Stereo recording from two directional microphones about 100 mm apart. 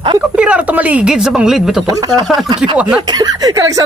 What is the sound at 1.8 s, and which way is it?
Speech, 40° right (ahead or behind).